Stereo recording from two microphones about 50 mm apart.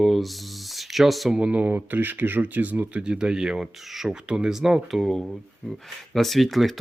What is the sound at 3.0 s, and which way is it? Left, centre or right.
Speech, centre.